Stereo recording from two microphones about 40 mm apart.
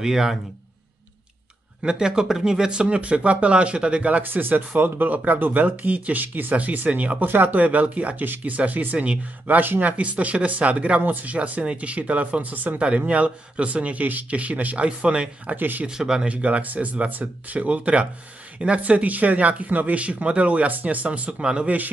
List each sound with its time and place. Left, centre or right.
0.0 s a man's voice: centre
1.8 s speech: right
4.2 s speech: right
9.9 s speech: right
11.0 s speech: right
11.3 s speech: right
12.7 s speech: right
14.9 s speech: right
15.5 s speech: right
15.9 s a man's voice: centre
16.3 s speech: right
21.4 s speech: centre